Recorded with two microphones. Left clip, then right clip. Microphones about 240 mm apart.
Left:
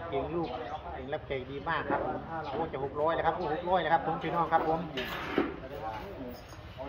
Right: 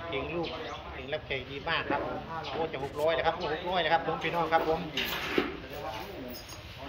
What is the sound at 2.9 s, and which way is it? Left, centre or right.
A man's voice, left.